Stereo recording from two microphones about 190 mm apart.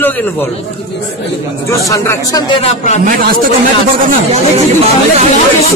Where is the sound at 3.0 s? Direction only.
50° right (ahead or behind).